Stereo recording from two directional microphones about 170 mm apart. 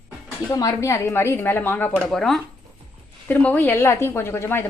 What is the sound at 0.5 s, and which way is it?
A woman's voice, 20° left (ahead or behind).